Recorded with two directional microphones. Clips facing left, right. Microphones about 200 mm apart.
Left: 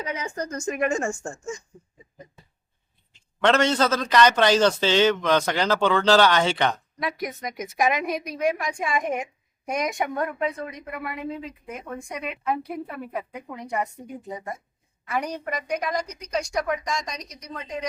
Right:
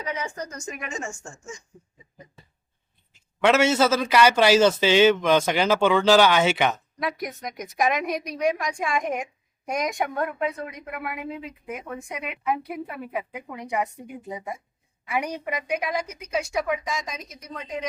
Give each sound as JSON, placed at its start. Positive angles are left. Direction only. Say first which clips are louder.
{"t": 0.0, "sound": "a woman's voice", "louder": "left 1 dB", "side_deg": 35}
{"t": 0.5, "sound": "a woman's voice", "louder": "left 9 dB", "side_deg": 50}
{"t": 3.1, "sound": "a man's voice", "louder": "right 1 dB", "side_deg": -5}